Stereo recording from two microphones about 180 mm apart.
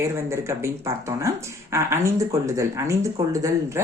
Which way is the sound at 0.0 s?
15° right (ahead or behind).